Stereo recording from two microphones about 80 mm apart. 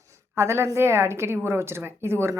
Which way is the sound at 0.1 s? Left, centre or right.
Right.